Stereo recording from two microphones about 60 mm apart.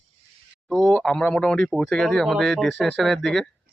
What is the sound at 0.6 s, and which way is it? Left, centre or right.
Speech, centre.